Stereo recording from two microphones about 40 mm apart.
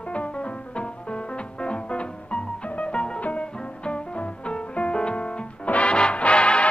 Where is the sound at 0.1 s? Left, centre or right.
Left.